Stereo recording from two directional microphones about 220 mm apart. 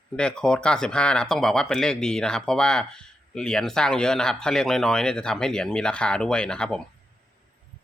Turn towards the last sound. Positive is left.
turn(degrees=5)  # may be behind; listen again after turning